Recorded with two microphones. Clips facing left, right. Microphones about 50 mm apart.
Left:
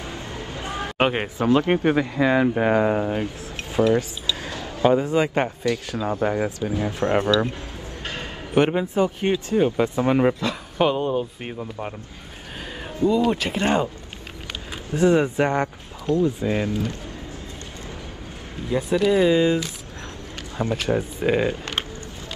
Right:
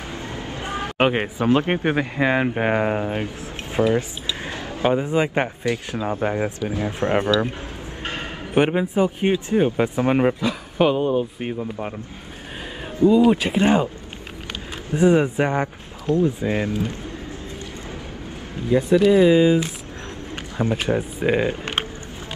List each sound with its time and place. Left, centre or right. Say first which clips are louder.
0.9 s speech: right 2 dB; centre
1.5 s speech: left 1 dB; right
4.4 s speech: left 2 dB; right
8.0 s a sound: right 3 dB; right
8.5 s speech: right 1 dB; centre
13.1 s speech: right 5 dB; centre
14.9 s speech: right 1 dB; right
16.2 s speech: right 1 dB; right
18.9 s speech: right 3 dB; centre
20.5 s speech: right 2 dB; right
20.9 s speech: left 1 dB; centre
21.5 s a sound: right 2 dB; right